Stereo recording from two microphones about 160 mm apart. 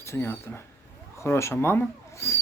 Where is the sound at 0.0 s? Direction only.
15° left (ahead or behind).